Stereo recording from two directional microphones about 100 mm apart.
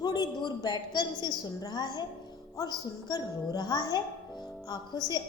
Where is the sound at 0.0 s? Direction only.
45° left (ahead or behind).